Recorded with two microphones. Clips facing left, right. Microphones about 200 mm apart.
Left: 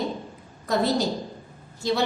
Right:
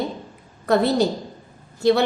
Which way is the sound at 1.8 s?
60° right (ahead or behind).